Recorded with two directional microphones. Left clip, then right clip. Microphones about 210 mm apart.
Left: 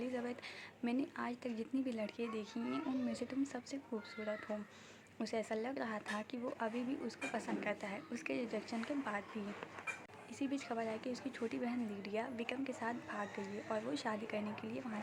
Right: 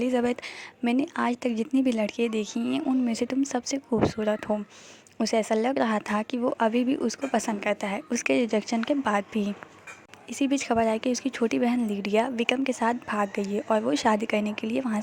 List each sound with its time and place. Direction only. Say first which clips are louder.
0.0 s speech: right 17 dB; 45° right (ahead or behind)